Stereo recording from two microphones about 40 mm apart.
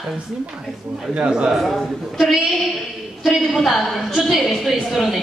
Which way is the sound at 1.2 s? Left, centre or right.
Right.